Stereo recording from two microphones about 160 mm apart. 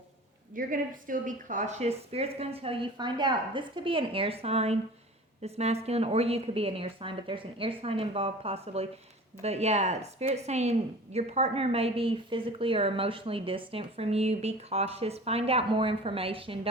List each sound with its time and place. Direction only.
0.5 s a woman's voice: 60° right (ahead or behind); by 16.6 s 35° right (ahead or behind)